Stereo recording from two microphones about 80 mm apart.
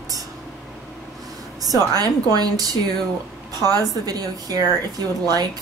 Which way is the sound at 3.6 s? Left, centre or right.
Right.